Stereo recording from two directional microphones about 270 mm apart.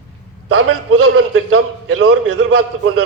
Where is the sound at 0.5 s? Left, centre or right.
Right.